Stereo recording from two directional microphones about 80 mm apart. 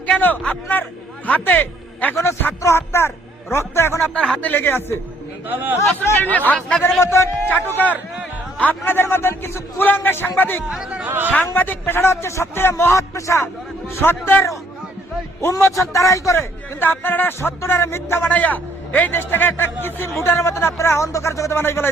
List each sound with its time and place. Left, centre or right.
0.0 s a man's voice: left
2.6 s a man's voice: left
4.1 s a man's voice: centre; by 4.9 s left
6.3 s a man's voice: centre
7.0 s a man's voice: left
7.5 s a man's voice: left
10.7 s speech: centre
11.0 s a man's voice: right
11.5 s a man's voice: left